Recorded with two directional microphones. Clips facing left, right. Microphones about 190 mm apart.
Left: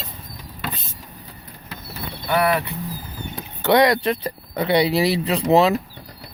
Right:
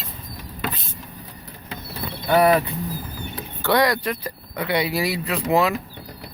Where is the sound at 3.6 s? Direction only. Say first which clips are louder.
Left 4 dB; 20° left (ahead or behind).